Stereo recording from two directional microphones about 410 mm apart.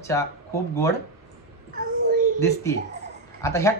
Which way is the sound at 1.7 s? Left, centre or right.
Centre.